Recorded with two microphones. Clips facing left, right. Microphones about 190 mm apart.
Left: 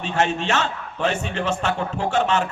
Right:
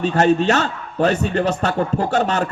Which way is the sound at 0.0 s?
40° right (ahead or behind).